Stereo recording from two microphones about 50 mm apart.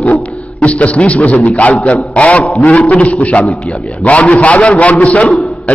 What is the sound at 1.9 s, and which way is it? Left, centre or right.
A man's voice, left.